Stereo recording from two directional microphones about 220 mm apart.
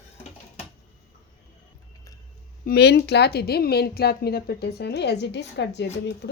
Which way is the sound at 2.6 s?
50° left (ahead or behind).